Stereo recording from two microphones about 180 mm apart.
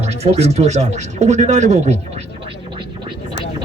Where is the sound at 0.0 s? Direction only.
35° right (ahead or behind).